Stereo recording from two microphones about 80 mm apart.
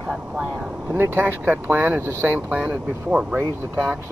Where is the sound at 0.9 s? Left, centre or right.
Right.